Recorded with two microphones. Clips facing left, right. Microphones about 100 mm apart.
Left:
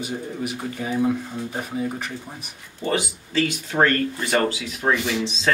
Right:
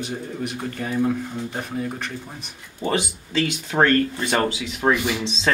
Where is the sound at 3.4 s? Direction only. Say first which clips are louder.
Even; 20° right (ahead or behind).